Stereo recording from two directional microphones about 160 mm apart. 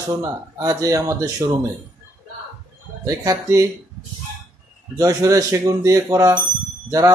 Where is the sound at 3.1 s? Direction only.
20° right (ahead or behind).